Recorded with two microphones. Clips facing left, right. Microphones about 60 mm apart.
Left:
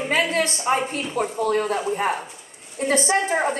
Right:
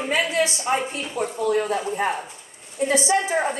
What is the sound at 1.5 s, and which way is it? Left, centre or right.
A woman's voice, left.